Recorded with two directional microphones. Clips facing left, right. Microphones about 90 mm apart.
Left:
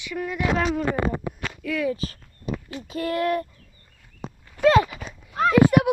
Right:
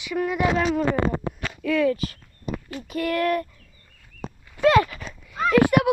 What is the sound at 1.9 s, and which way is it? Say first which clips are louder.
Speech: right 2 dB; 35° left (ahead or behind).